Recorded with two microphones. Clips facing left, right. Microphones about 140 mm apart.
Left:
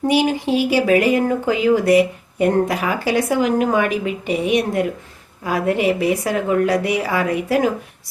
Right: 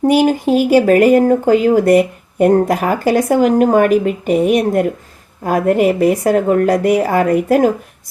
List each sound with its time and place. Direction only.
0.0 s speech: 45° right (ahead or behind)